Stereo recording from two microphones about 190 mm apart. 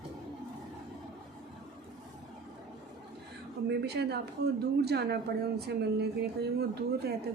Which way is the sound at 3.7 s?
60° right (ahead or behind).